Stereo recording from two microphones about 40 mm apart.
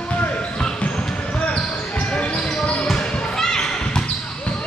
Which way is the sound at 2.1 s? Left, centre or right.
Left.